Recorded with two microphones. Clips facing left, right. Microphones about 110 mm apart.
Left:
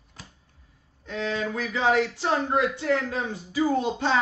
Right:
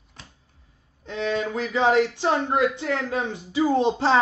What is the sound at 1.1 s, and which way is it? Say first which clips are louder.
A man's voice: right 3 dB; 20° right (ahead or behind).